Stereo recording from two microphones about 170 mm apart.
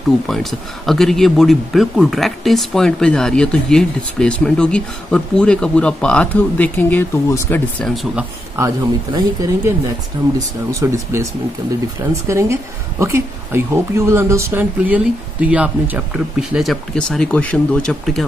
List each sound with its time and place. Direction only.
0.3 s speech: centre (ahead or behind)
7.8 s speech: centre (ahead or behind)
8.5 s speech: 20° right (ahead or behind); by 18.2 s centre (ahead or behind)